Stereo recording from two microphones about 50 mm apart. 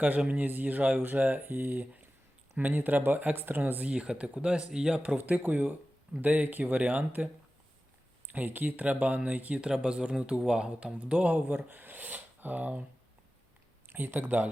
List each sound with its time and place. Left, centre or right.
0.3 s speech: right
3.9 s speech: centre
5.0 s speech: right
8.3 s speech: right
13.9 s speech: right